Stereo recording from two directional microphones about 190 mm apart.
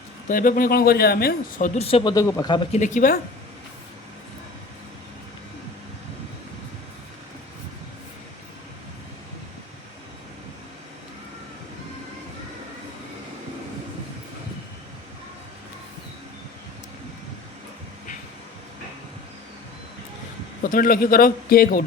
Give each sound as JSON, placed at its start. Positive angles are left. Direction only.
{"t": 0.3, "sound": "a man's voice", "side_deg": 45}
{"t": 2.7, "sound": "speech", "side_deg": 40}
{"t": 20.7, "sound": "speech", "side_deg": 50}